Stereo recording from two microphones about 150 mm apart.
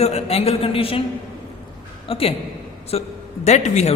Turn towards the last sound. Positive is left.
turn(degrees=50)  # may be behind; listen again after turning